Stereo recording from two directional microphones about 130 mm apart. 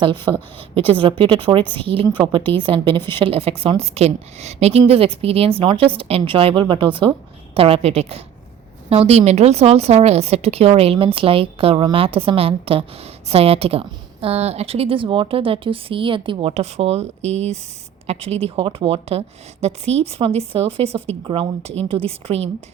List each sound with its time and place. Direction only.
0.0 s a woman's voice: 40° right (ahead or behind)